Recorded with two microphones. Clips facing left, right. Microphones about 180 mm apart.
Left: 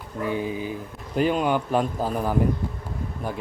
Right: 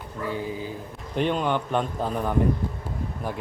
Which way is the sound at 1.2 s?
5° left (ahead or behind).